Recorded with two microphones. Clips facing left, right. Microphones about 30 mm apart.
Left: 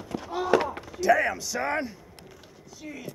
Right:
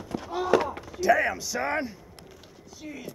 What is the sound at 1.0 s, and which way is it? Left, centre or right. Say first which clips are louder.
Speech: even; centre.